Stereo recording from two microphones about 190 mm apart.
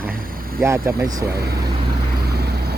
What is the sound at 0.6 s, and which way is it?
Speech, 15° right (ahead or behind).